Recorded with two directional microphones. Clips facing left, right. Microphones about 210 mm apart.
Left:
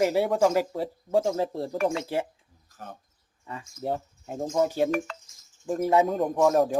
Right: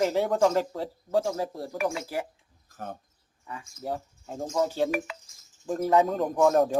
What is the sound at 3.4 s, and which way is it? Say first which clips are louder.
Speech: left 3 dB; 25° left (ahead or behind).